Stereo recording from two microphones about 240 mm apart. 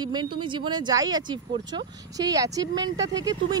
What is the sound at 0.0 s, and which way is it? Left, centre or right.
Speech, centre.